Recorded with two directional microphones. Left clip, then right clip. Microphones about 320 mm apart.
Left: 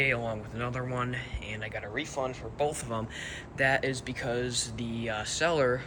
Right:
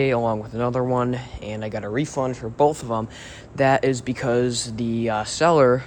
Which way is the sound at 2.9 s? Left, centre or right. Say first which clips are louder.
Right 8 dB; centre.